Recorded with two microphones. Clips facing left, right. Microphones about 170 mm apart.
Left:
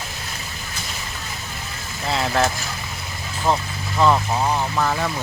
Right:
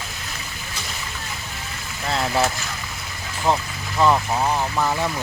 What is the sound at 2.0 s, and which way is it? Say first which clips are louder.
Vehicle: left 1 dB; centre (ahead or behind).